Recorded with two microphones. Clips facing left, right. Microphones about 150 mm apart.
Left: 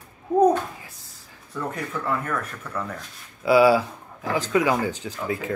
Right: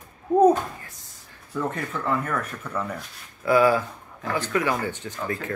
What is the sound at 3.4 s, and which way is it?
Speech, 10° left (ahead or behind).